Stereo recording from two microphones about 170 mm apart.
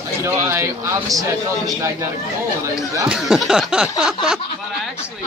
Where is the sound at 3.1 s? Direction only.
Centre (ahead or behind).